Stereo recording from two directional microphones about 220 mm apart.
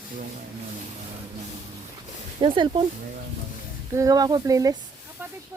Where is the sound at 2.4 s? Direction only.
20° right (ahead or behind).